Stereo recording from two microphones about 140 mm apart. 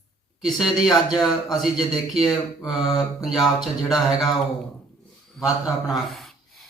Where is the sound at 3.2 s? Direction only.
Centre (ahead or behind).